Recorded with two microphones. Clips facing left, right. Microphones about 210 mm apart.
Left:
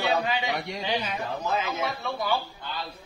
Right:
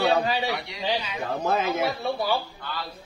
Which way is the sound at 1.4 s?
50° right (ahead or behind).